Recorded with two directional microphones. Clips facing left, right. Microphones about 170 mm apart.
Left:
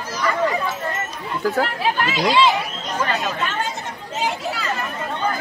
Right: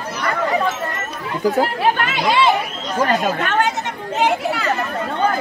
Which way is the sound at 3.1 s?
50° right (ahead or behind).